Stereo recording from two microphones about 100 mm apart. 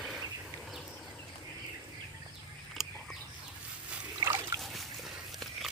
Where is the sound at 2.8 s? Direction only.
5° right (ahead or behind).